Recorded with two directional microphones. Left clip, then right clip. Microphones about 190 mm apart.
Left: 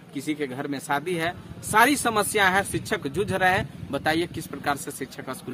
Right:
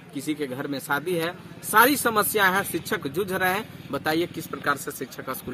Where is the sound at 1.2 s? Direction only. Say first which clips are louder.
Left 1 dB; 10° left (ahead or behind).